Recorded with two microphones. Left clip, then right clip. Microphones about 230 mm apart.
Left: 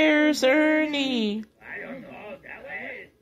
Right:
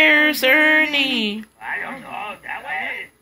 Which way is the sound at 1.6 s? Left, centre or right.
Right.